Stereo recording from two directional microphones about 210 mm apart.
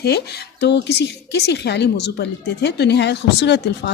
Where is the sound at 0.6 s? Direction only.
55° left (ahead or behind).